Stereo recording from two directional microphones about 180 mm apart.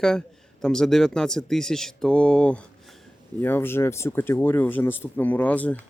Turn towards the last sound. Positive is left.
turn(degrees=10)  # may be behind; listen again after turning